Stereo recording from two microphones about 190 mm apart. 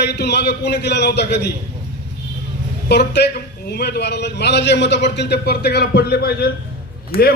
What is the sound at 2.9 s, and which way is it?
A man's voice, 60° left (ahead or behind).